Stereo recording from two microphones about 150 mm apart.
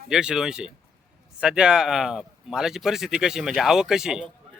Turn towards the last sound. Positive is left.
turn(degrees=-5)  # may be behind; listen again after turning